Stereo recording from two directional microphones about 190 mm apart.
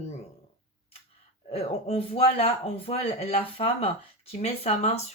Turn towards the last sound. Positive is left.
turn(degrees=35)  # may be behind; listen again after turning